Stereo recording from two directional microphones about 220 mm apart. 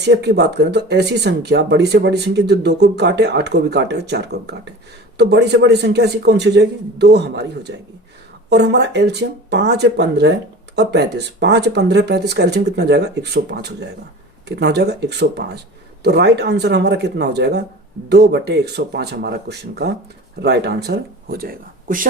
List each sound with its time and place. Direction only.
0.0 s speech: 50° right (ahead or behind)